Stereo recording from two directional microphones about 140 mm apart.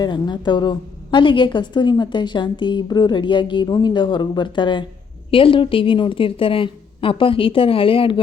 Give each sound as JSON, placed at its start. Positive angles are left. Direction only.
{"t": 0.0, "sound": "a woman's voice", "side_deg": 30}